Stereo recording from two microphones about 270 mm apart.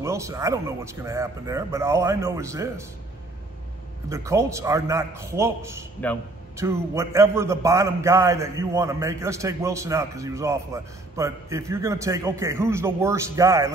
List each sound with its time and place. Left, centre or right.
0.0 s a man's voice: centre
4.1 s a man's voice: centre